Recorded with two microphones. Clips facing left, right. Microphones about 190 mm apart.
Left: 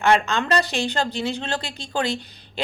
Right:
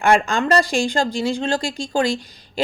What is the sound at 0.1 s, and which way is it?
Speech, 50° right (ahead or behind).